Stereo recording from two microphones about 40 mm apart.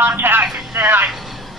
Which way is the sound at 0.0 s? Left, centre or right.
Right.